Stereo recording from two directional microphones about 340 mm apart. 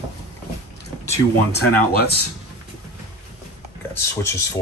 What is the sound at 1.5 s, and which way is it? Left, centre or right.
Speech, left.